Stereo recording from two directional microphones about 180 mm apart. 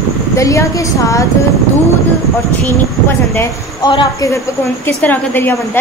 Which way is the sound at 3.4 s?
25° left (ahead or behind).